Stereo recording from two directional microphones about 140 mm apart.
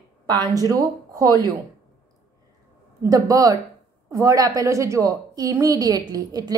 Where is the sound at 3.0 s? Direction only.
25° right (ahead or behind).